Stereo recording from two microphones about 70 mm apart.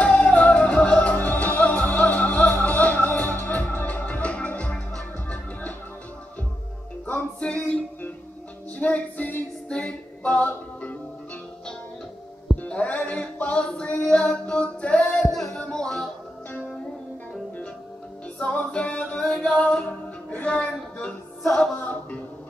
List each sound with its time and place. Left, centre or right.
0.0 s music: centre
7.3 s music: centre
8.7 s a capella: left
12.6 s music: centre
15.3 s music: centre
18.4 s music: centre
19.2 s singing: centre
19.7 s music: centre
21.4 s music: centre
21.7 s a sound: left